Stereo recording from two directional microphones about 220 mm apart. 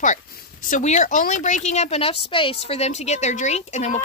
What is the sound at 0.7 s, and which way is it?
A woman's voice, 35° left (ahead or behind).